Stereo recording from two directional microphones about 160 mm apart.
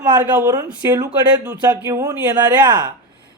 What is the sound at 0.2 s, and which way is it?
Speech, 20° right (ahead or behind).